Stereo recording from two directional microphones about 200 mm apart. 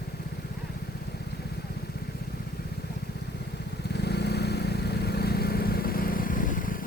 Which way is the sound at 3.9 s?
55° left (ahead or behind).